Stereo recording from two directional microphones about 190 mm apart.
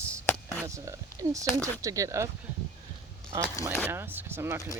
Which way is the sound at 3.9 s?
10° right (ahead or behind).